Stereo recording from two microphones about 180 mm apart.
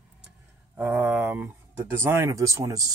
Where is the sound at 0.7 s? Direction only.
10° right (ahead or behind).